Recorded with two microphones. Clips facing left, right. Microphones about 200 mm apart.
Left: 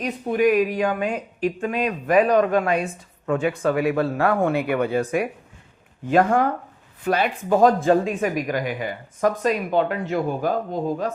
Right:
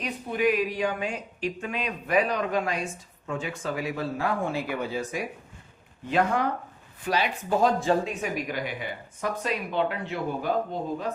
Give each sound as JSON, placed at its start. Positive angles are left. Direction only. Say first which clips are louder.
{"t": 0.0, "sound": "speech", "louder": "left 6 dB", "side_deg": 45}
{"t": 6.1, "sound": "speech", "louder": "left 6 dB", "side_deg": 50}